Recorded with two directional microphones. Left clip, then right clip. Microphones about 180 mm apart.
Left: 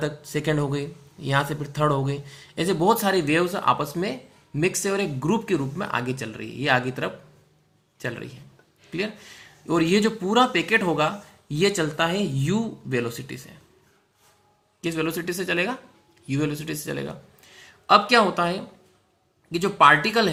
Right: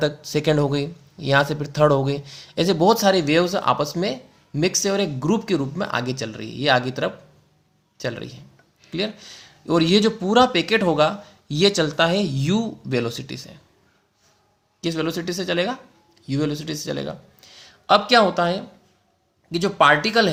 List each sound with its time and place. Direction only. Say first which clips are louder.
0.0 s speech: right 6 dB; 45° right (ahead or behind)
2.7 s speech: right 4 dB; 35° right (ahead or behind)
14.8 s a man's voice: right 2 dB; 30° right (ahead or behind)